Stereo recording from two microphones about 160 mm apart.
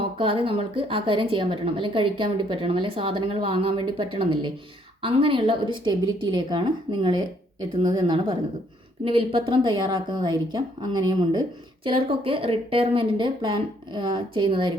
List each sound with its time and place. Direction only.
0.0 s a woman's voice: 35° right (ahead or behind)